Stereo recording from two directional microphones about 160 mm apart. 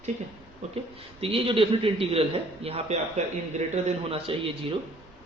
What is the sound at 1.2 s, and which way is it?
Speech, 35° right (ahead or behind).